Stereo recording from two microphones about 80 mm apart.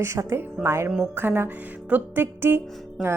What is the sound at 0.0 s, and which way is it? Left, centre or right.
A woman's voice, right.